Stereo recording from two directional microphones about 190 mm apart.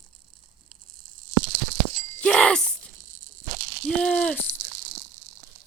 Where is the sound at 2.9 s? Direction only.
45° right (ahead or behind).